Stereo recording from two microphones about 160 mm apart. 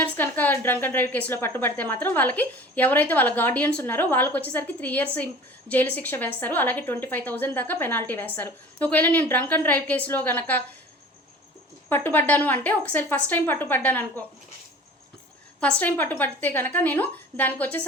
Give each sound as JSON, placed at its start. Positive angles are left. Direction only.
{"t": 0.0, "sound": "a woman's voice", "side_deg": 10}
{"t": 11.9, "sound": "a woman's voice", "side_deg": 15}
{"t": 15.6, "sound": "a woman's voice", "side_deg": 10}